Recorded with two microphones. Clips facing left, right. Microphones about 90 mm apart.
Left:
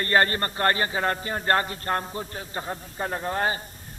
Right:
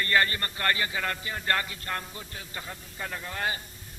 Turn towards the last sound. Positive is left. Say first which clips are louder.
# left 7 dB
turn(degrees=35)  # may be behind; listen again after turning